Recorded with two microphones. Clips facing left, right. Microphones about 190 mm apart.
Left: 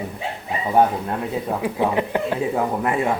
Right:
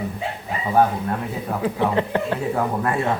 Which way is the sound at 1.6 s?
15° left (ahead or behind).